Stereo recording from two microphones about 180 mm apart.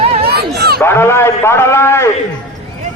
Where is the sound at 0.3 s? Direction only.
65° right (ahead or behind).